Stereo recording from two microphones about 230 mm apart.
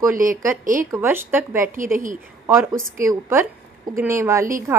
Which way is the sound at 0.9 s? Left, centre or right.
Centre.